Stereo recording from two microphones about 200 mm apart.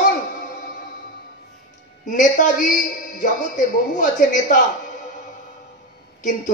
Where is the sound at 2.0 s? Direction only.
40° left (ahead or behind).